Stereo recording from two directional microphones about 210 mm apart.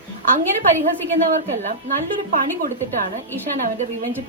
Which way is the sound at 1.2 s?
35° right (ahead or behind).